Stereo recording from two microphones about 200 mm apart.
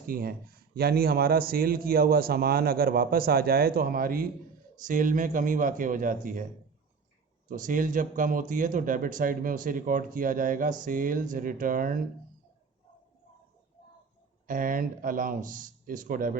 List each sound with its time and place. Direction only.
0.0 s speech: 45° right (ahead or behind)
7.4 s speech: 40° right (ahead or behind)
14.4 s speech: 45° right (ahead or behind)